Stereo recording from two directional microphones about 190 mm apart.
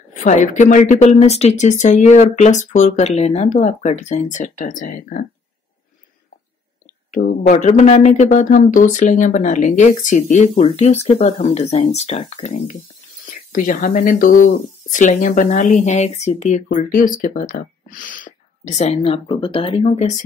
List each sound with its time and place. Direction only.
0.1 s speech: 40° left (ahead or behind)
7.1 s speech: 40° left (ahead or behind)
13.2 s speech: 45° left (ahead or behind)